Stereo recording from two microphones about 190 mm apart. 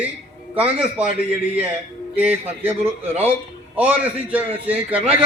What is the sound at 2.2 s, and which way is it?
A man's voice, 10° right (ahead or behind).